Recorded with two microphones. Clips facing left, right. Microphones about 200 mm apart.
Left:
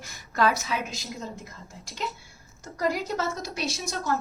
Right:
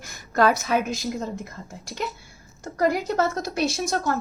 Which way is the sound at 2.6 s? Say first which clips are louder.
Right 5 dB; 55° right (ahead or behind).